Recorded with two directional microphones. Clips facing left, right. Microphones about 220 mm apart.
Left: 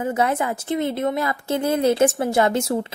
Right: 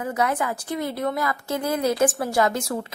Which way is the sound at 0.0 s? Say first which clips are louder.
Left 3 dB; 25° left (ahead or behind).